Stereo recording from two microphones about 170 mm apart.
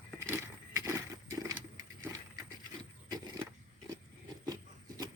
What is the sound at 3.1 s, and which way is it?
Vehicle, 25° right (ahead or behind).